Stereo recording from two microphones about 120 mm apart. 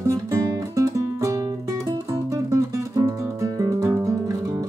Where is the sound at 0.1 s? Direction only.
25° right (ahead or behind).